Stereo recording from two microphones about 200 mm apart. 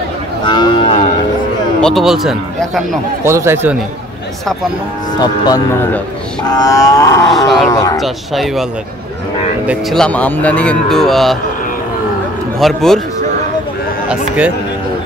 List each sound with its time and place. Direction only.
0.5 s moo: 20° left (ahead or behind)
1.8 s speech: centre (ahead or behind)
3.3 s speech: 15° right (ahead or behind)
5.2 s speech: 20° left (ahead or behind)
6.4 s wild animals: 20° left (ahead or behind)
7.2 s speech: centre (ahead or behind)
7.7 s wild animals: 15° left (ahead or behind)
8.0 s speech: centre (ahead or behind)
9.7 s speech: centre (ahead or behind)
12.5 s speech: centre (ahead or behind)
14.0 s speech: 5° right (ahead or behind)